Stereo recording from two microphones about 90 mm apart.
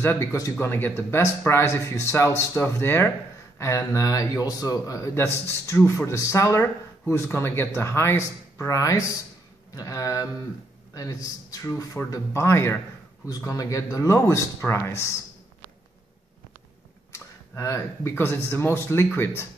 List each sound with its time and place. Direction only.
0.0 s speech: 30° left (ahead or behind)
17.1 s speech: 30° left (ahead or behind)